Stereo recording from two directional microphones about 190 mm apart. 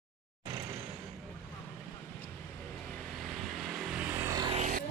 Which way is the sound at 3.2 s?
Centre (ahead or behind).